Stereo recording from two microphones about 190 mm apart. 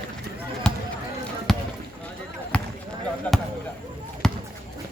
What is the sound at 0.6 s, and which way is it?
Basketball bounce, 5° left (ahead or behind).